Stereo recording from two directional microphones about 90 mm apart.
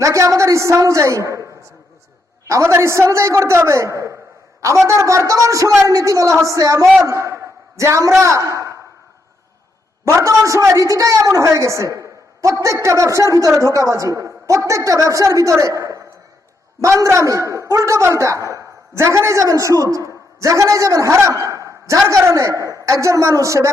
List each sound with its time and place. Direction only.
0.0 s a woman's voice: 35° right (ahead or behind)
2.5 s a woman's voice: 30° right (ahead or behind)
10.1 s a woman's voice: 35° right (ahead or behind)